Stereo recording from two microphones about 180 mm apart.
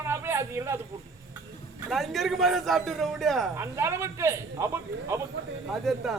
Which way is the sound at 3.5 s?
15° right (ahead or behind).